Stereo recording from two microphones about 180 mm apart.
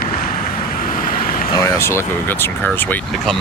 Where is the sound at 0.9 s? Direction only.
50° left (ahead or behind).